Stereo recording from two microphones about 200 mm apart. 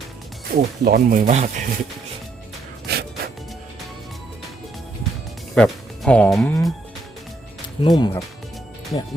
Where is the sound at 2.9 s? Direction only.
55° right (ahead or behind).